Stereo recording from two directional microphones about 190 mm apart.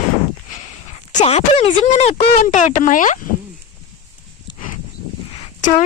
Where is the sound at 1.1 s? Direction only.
40° left (ahead or behind).